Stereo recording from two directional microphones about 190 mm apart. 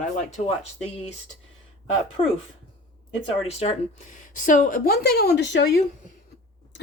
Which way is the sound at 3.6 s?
30° left (ahead or behind).